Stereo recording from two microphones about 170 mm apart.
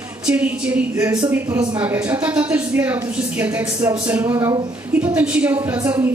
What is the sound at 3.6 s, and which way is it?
A woman's voice, 20° right (ahead or behind).